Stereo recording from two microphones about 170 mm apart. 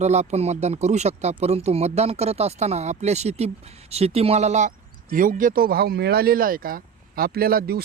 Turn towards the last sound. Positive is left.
turn(degrees=-65)  # may be behind; listen again after turning